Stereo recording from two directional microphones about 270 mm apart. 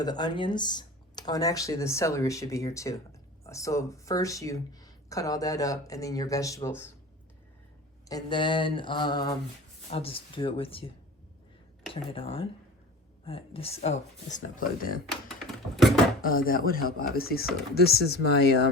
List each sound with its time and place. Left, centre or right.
0.0 s speech: centre
8.0 s speech: centre; by 15.0 s left
16.2 s speech: left